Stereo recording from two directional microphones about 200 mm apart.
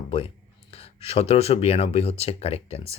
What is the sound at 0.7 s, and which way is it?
Speech, 30° left (ahead or behind).